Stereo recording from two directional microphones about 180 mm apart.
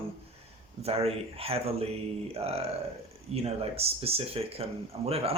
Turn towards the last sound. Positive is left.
turn(degrees=-35)  # may be behind; listen again after turning